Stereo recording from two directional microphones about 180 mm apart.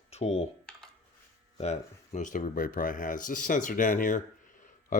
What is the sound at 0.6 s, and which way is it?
Computer keyboard, 5° left (ahead or behind).